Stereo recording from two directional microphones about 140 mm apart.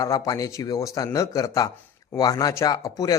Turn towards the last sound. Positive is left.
turn(degrees=25)  # may be behind; listen again after turning